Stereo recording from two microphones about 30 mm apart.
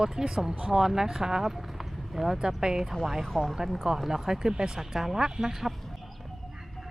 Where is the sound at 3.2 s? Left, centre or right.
Centre.